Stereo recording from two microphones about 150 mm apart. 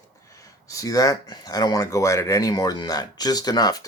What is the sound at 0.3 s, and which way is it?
Speech, 20° left (ahead or behind).